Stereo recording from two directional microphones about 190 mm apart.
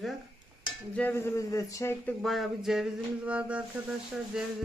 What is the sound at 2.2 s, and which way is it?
Speech, centre (ahead or behind).